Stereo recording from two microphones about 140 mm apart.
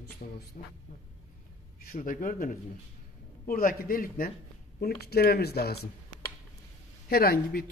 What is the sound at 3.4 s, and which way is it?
Speech, 85° left.